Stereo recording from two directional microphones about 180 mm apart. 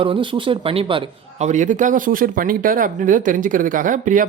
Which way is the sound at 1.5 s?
45° right (ahead or behind).